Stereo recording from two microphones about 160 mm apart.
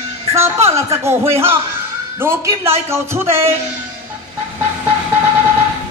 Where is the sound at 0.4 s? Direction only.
15° right (ahead or behind).